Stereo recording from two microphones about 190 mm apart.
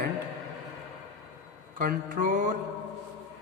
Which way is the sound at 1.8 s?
45° right (ahead or behind).